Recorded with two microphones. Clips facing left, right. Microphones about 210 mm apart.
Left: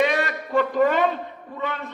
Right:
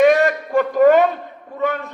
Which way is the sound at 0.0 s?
45° right (ahead or behind).